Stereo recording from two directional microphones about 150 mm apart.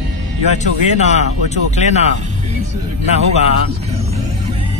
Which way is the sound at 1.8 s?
50° left (ahead or behind).